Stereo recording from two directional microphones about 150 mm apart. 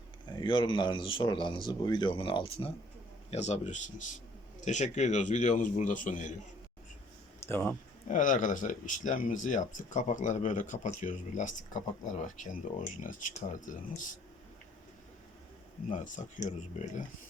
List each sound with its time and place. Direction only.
0.3 s speech: 30° left (ahead or behind)
3.2 s speech: 50° left (ahead or behind)
7.4 s speech: 15° left (ahead or behind)
8.0 s speech: 60° left (ahead or behind)
15.9 s speech: 55° left (ahead or behind)